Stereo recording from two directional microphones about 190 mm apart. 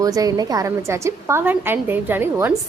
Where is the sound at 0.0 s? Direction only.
20° right (ahead or behind).